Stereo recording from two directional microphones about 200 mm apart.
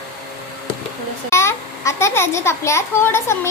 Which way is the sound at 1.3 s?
15° left (ahead or behind).